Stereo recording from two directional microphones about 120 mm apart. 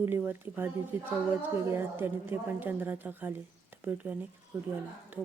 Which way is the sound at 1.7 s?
20° right (ahead or behind).